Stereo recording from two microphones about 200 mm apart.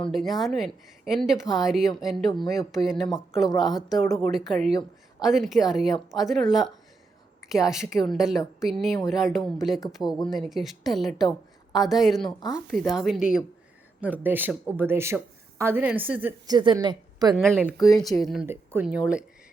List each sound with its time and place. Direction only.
0.1 s a woman's voice: centre (ahead or behind)
12.2 s speech: 20° left (ahead or behind)
12.9 s a woman's voice: centre (ahead or behind)
16.5 s a woman's voice: 20° right (ahead or behind)
17.3 s speech: 5° right (ahead or behind)
17.7 s speech: 20° left (ahead or behind)
18.2 s a woman's voice: centre (ahead or behind)
18.4 s speech: 10° right (ahead or behind)